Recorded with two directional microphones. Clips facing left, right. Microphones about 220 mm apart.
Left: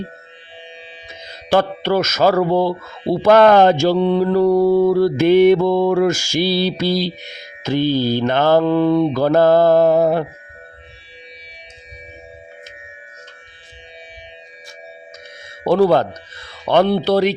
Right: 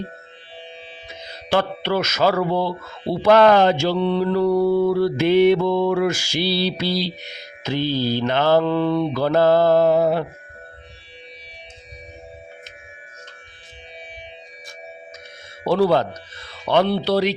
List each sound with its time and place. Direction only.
1.5 s speech: 45° left (ahead or behind)
15.6 s speech: 50° left (ahead or behind)